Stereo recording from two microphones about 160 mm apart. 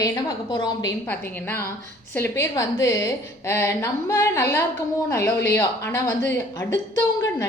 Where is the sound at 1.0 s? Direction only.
10° left (ahead or behind).